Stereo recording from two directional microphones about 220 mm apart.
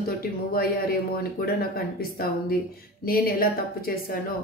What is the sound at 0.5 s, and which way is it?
A woman's voice, 40° left (ahead or behind).